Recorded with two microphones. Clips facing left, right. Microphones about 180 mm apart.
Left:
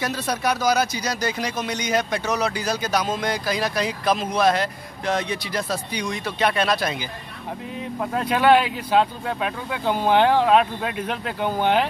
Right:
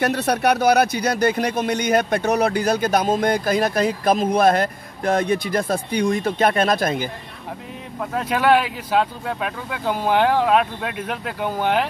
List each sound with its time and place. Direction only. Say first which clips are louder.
0.0 s speech: right 5 dB; 65° right (ahead or behind)
8.0 s speech: even; 5° left (ahead or behind)